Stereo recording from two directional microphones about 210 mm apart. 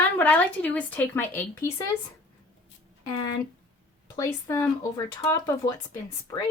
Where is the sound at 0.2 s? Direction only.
5° left (ahead or behind).